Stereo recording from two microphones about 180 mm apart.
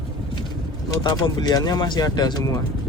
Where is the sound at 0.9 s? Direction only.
20° left (ahead or behind).